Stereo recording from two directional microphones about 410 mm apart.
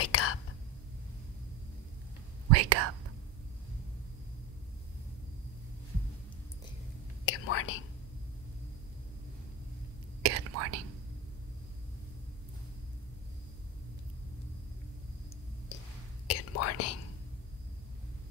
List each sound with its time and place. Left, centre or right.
0.0 s whispering: left
2.5 s whispering: right
7.2 s whispering: left
10.2 s whispering: right
15.7 s cough: left
16.3 s whispering: left